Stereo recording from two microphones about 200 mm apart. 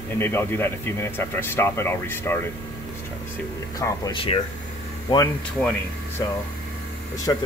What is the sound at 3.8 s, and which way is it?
Speech, 20° left (ahead or behind).